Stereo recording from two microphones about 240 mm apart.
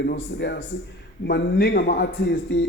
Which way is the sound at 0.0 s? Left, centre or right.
Left.